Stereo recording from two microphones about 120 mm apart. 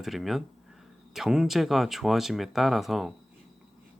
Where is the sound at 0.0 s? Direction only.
Centre (ahead or behind).